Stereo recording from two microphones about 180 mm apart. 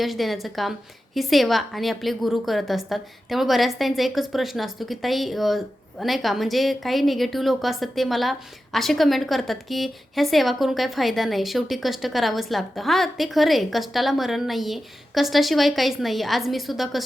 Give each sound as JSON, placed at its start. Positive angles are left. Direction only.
{"t": 0.0, "sound": "a woman's voice", "side_deg": 0}